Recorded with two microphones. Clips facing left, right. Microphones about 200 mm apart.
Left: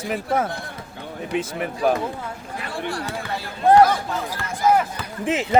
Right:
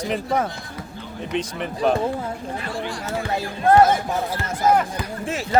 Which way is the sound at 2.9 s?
60° left (ahead or behind).